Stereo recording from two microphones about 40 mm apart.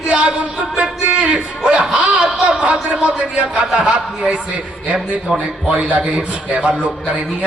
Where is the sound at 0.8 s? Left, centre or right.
Right.